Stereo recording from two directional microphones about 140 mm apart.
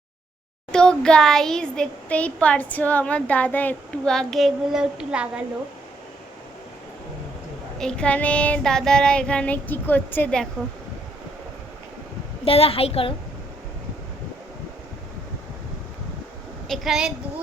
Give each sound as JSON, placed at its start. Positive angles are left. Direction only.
{"t": 0.7, "sound": "a child's voice", "side_deg": 5}
{"t": 7.8, "sound": "a child's voice", "side_deg": 5}
{"t": 12.5, "sound": "a woman's voice", "side_deg": 45}
{"t": 16.6, "sound": "a woman's voice", "side_deg": 0}